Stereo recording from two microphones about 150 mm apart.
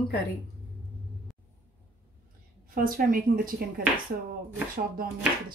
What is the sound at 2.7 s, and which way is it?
Speech, 70° right (ahead or behind).